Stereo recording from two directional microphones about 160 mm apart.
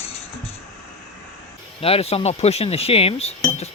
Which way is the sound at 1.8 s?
40° left (ahead or behind).